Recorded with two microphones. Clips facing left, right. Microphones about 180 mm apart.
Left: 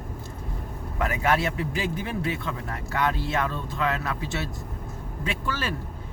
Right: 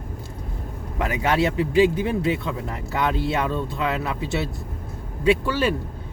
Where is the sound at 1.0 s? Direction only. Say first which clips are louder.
Right 3 dB; 20° right (ahead or behind).